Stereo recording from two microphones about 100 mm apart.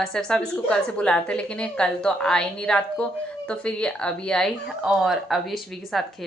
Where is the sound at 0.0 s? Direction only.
5° left (ahead or behind).